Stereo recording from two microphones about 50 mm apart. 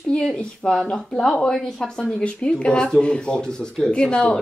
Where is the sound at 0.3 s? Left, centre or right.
Centre.